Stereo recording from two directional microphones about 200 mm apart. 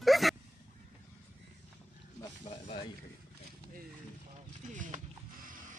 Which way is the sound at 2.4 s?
25° left (ahead or behind).